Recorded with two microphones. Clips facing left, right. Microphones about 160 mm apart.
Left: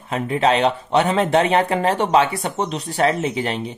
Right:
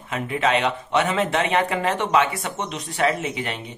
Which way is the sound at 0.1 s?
35° left (ahead or behind).